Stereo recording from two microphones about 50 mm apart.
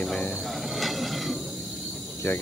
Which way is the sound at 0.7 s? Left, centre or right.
Centre.